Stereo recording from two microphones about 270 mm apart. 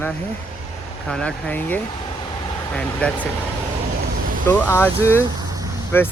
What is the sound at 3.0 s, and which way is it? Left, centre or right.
Speech, centre.